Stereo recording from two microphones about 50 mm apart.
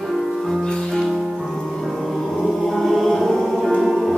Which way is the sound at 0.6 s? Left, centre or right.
Centre.